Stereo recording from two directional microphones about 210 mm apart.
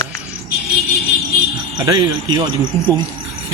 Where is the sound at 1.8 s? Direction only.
20° right (ahead or behind).